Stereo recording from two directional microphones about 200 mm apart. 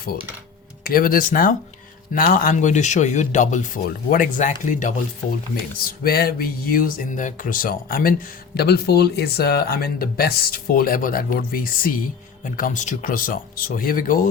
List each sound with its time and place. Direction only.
0.9 s speech: 45° left (ahead or behind)